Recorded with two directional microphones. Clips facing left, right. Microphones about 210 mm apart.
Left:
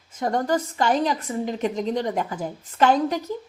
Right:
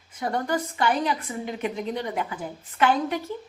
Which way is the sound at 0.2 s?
40° left (ahead or behind).